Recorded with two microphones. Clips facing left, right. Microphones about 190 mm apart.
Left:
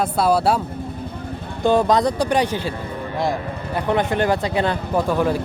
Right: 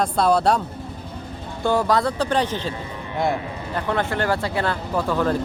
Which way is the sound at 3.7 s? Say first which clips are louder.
Left 4 dB; 15° left (ahead or behind).